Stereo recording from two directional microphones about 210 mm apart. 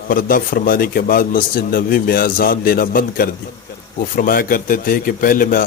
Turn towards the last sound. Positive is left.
turn(degrees=40)  # may be behind; listen again after turning